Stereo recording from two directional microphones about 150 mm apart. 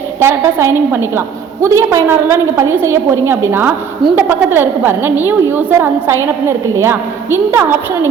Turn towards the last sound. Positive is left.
turn(degrees=-15)  # may be behind; listen again after turning